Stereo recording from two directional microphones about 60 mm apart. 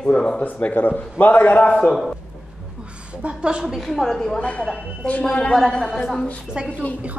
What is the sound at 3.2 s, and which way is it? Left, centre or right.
Speech, centre.